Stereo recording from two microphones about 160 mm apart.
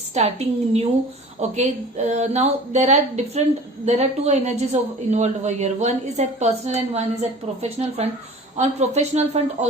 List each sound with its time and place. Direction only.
0.1 s a woman's voice: 45° right (ahead or behind)